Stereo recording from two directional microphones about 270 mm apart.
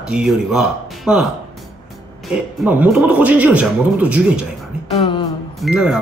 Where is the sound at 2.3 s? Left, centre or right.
Centre.